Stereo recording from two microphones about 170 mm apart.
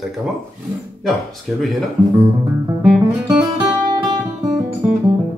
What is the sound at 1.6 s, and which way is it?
Speech, centre (ahead or behind).